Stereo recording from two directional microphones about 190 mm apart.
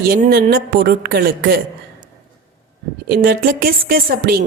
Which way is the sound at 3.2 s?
50° right (ahead or behind).